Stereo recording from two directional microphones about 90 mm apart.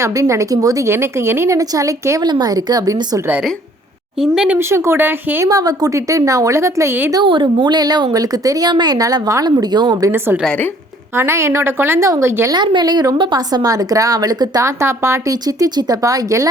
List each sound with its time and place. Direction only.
0.0 s a woman's voice: 35° right (ahead or behind)
4.2 s speech: 10° right (ahead or behind)
4.5 s a woman's voice: 25° right (ahead or behind)
5.5 s a woman's voice: 45° right (ahead or behind)
7.1 s a woman's voice: 60° right (ahead or behind)
11.1 s a woman's voice: 30° right (ahead or behind)
12.5 s a woman's voice: 55° right (ahead or behind)
14.6 s a woman's voice: 30° right (ahead or behind)
15.3 s a woman's voice: 40° right (ahead or behind)